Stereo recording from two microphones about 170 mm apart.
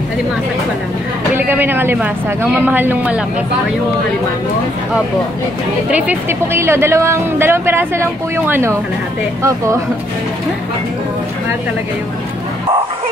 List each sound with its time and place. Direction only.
1.3 s speech: 10° right (ahead or behind)
5.9 s speech: 10° right (ahead or behind)